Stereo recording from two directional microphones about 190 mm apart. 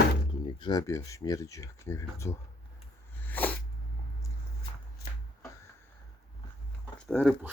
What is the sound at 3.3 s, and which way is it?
Sneeze, 10° left (ahead or behind).